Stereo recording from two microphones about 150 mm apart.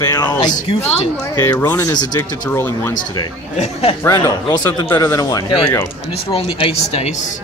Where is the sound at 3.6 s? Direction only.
40° left (ahead or behind).